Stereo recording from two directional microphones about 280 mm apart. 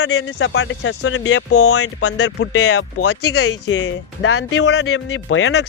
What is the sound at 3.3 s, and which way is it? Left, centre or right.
A man's voice, left.